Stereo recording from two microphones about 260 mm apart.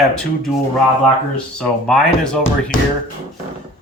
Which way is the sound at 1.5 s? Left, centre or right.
Centre.